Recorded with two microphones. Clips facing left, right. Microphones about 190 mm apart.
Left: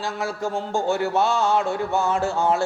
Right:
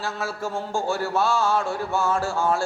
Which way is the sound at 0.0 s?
15° left (ahead or behind).